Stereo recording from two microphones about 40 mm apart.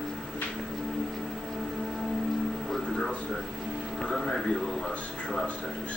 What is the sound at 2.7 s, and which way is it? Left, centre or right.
Music, centre.